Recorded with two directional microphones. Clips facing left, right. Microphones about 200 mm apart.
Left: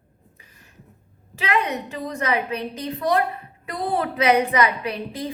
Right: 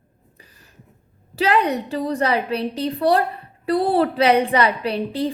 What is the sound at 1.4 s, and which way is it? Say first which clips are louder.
A woman's voice: right 5 dB; 35° right (ahead or behind).